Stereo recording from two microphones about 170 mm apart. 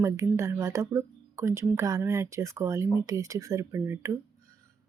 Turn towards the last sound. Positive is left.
turn(degrees=-15)  # may be behind; listen again after turning